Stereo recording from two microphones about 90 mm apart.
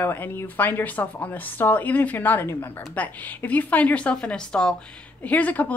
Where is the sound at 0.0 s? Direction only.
20° left (ahead or behind).